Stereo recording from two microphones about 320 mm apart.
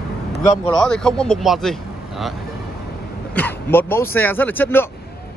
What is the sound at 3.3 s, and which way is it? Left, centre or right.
Speech, centre.